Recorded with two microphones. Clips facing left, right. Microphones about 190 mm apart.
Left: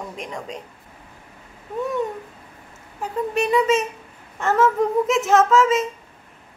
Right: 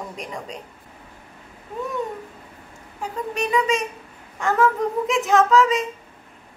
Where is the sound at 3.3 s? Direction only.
Centre (ahead or behind).